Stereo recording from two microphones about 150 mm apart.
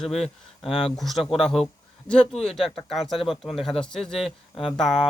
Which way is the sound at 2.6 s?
Centre (ahead or behind).